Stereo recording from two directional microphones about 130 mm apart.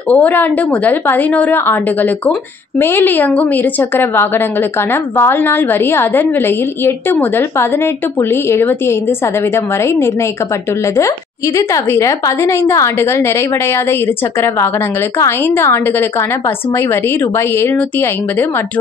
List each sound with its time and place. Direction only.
0.1 s a woman's voice: 15° left (ahead or behind)